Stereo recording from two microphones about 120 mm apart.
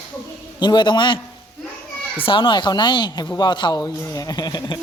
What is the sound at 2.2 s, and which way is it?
Speech, 45° left (ahead or behind).